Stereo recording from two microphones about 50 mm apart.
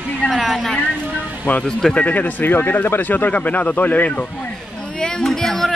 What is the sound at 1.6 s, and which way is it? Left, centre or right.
Speech, centre.